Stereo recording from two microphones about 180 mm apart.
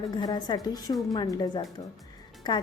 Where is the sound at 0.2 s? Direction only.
20° left (ahead or behind).